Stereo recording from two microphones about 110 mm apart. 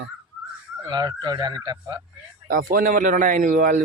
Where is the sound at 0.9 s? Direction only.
40° right (ahead or behind).